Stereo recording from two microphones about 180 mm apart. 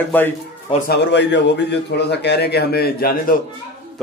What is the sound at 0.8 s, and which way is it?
A man's voice, 70° left (ahead or behind).